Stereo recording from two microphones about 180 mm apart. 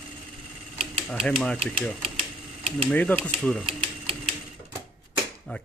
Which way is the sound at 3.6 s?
30° right (ahead or behind).